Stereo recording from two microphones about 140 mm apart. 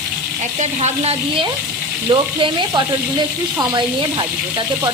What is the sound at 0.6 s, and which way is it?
Speech, 55° right (ahead or behind).